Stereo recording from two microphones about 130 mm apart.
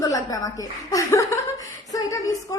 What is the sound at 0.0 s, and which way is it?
A woman's voice, 30° left (ahead or behind).